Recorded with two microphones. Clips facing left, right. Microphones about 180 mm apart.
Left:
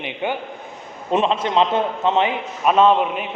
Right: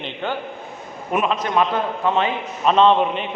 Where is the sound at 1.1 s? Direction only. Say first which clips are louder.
Left 2 dB; 30° left (ahead or behind).